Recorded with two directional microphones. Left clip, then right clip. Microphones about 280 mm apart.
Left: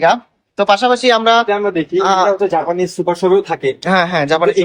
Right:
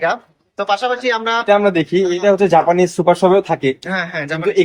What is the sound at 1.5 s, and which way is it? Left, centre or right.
Speech, right.